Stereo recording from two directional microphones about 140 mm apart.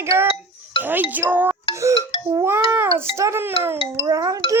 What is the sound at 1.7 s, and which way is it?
Music, 20° right (ahead or behind).